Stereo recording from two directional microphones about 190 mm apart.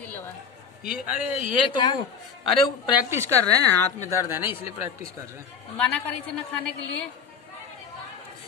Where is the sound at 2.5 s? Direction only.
10° right (ahead or behind).